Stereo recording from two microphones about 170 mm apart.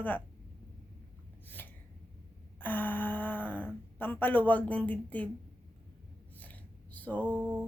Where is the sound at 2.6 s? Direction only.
10° left (ahead or behind).